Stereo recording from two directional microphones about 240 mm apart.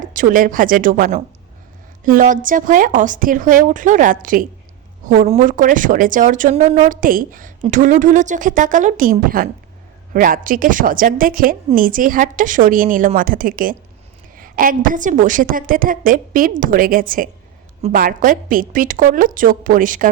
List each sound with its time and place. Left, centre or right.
0.1 s a woman's voice: right